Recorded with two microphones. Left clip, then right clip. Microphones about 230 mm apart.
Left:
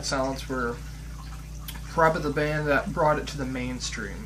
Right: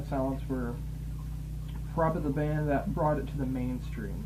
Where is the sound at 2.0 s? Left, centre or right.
Centre.